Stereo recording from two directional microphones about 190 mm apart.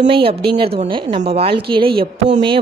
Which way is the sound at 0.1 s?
30° right (ahead or behind).